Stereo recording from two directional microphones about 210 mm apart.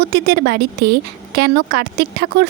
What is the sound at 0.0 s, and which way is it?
Speech, 50° right (ahead or behind).